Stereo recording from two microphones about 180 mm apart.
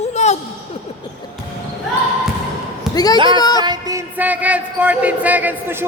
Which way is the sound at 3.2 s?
25° right (ahead or behind).